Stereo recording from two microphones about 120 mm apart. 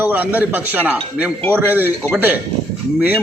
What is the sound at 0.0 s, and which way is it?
A man's voice, 15° right (ahead or behind).